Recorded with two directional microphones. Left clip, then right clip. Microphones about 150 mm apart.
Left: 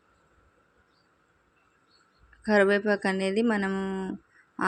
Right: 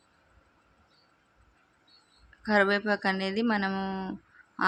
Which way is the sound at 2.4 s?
20° left (ahead or behind).